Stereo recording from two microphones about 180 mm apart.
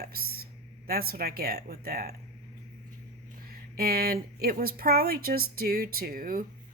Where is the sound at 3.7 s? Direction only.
55° right (ahead or behind).